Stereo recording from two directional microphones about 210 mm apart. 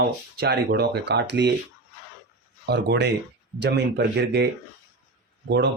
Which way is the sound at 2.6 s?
50° right (ahead or behind).